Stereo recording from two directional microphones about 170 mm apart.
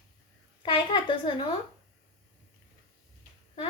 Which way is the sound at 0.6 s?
30° left (ahead or behind).